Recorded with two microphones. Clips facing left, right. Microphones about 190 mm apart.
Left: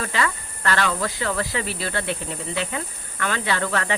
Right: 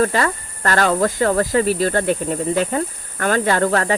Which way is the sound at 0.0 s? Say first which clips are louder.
Right 7 dB; 45° right (ahead or behind).